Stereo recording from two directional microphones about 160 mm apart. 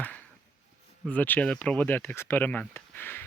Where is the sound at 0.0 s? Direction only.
10° left (ahead or behind).